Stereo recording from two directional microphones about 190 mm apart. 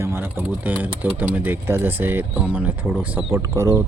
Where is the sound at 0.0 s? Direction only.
10° right (ahead or behind).